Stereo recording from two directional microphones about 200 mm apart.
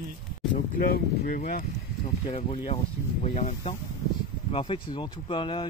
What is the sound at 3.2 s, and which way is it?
Speech, 35° left (ahead or behind).